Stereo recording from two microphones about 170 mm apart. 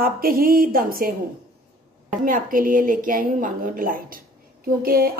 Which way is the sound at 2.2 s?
55° right (ahead or behind).